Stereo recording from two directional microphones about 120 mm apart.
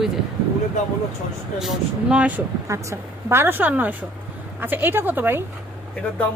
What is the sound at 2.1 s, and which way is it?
Speech, 10° right (ahead or behind).